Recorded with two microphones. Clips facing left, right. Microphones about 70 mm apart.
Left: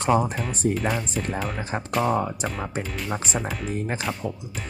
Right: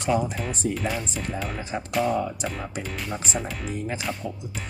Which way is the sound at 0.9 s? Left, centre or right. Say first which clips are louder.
Left 2 dB; centre.